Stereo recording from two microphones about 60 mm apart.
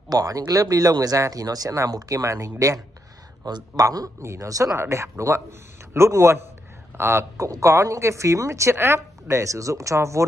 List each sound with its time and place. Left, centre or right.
0.1 s speech: right
1.3 s speech: right
3.7 s a man's voice: right
4.2 s speech: right
4.7 s a man's voice: right